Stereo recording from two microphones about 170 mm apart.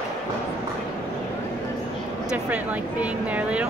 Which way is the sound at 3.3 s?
5° right (ahead or behind).